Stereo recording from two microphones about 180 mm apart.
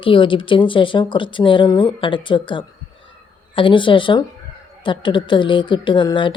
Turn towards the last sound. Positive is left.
turn(degrees=25)  # may be behind; listen again after turning